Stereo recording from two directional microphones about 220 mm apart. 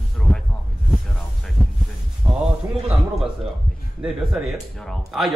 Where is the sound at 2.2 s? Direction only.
20° right (ahead or behind).